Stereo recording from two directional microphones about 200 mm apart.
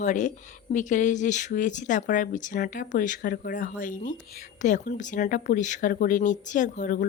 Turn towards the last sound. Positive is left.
turn(degrees=40)  # may be behind; listen again after turning